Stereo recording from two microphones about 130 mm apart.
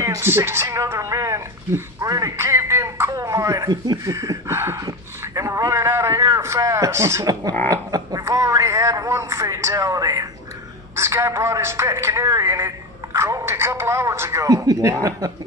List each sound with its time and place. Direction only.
0.0 s a man's voice: 20° right (ahead or behind)